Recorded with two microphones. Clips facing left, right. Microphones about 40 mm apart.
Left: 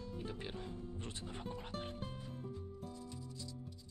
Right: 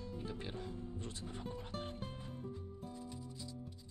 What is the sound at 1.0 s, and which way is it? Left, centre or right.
Speech, left.